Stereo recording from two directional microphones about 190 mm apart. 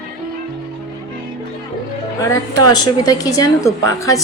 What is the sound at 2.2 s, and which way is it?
A woman's voice, 20° left (ahead or behind).